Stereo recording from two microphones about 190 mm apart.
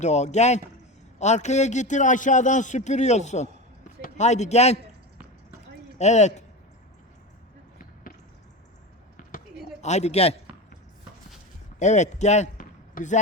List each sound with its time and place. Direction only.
0.0 s a man's voice: 35° left (ahead or behind)
6.0 s a man's voice: 35° left (ahead or behind)
9.8 s a man's voice: 35° left (ahead or behind)
11.8 s speech: 40° left (ahead or behind)